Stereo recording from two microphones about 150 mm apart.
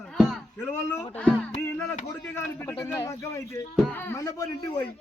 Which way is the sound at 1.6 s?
15° left (ahead or behind).